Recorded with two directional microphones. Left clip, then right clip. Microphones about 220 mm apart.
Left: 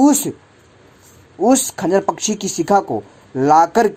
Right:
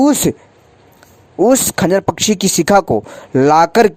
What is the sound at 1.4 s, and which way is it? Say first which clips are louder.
Speech: right 4 dB; 45° right (ahead or behind).